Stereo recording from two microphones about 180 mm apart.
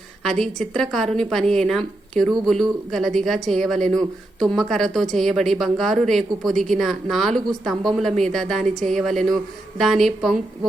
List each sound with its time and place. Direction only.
0.2 s speech: centre (ahead or behind)